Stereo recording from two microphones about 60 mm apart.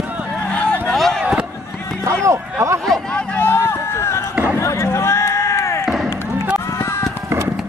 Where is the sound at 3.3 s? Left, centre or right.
Left.